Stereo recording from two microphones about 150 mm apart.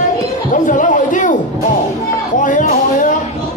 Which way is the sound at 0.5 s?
60° left (ahead or behind).